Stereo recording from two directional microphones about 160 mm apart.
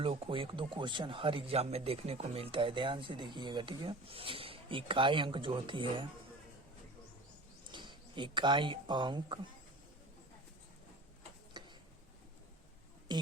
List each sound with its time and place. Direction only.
0.0 s speech: 35° right (ahead or behind)
7.7 s speech: 30° right (ahead or behind)
11.6 s tick-tock: 25° right (ahead or behind)
13.1 s a sound: 25° right (ahead or behind)